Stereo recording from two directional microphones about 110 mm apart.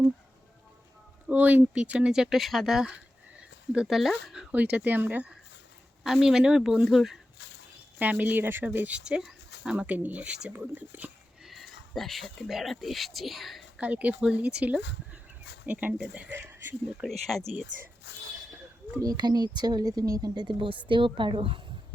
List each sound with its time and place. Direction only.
1.3 s speech: 15° right (ahead or behind)
4.5 s speech: 15° right (ahead or behind)
7.9 s speech: 15° right (ahead or behind)
11.4 s speech: centre (ahead or behind)
13.7 s speech: 15° right (ahead or behind)
17.0 s speech: centre (ahead or behind)
18.9 s speech: 35° right (ahead or behind); by 21.6 s 55° right (ahead or behind)